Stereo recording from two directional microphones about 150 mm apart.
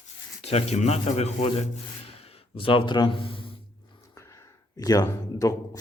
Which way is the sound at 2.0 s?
40° left (ahead or behind).